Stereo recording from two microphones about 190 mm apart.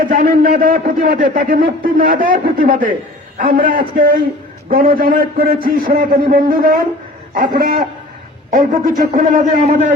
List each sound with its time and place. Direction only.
0.0 s a man's voice: 50° right (ahead or behind)